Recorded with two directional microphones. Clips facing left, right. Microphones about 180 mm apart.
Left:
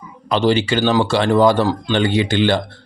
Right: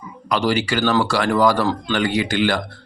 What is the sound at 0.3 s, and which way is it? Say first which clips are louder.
Speech: left 4 dB; 25° left (ahead or behind).